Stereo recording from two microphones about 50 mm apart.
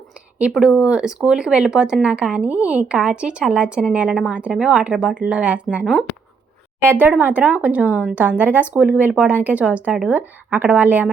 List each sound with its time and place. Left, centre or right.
0.7 s speech: right
4.4 s speech: right
6.9 s speech: right